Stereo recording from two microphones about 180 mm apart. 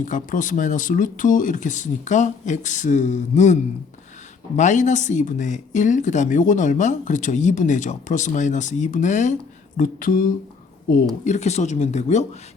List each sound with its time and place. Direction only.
0.0 s speech: 45° left (ahead or behind)
11.3 s speech: 40° left (ahead or behind)